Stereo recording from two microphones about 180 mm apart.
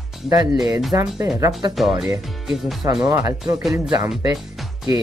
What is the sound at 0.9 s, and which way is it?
Speech, 15° right (ahead or behind).